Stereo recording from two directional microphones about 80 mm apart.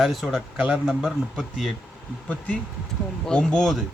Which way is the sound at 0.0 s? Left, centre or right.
Centre.